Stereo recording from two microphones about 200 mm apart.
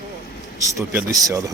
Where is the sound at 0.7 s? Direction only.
15° right (ahead or behind).